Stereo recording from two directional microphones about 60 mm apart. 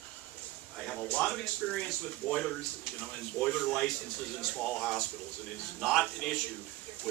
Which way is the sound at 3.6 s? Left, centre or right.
Centre.